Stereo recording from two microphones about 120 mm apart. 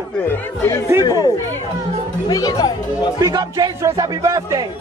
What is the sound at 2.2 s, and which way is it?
Speech, 30° left (ahead or behind).